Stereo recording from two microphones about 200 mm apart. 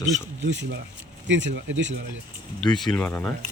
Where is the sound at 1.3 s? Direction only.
65° right (ahead or behind).